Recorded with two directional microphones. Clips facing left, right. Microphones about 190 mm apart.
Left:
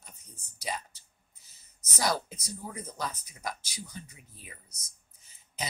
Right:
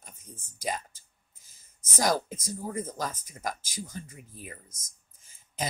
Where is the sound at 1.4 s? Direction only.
45° right (ahead or behind).